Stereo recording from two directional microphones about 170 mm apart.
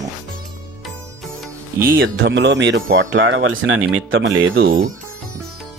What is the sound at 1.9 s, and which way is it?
Speech, 75° right (ahead or behind).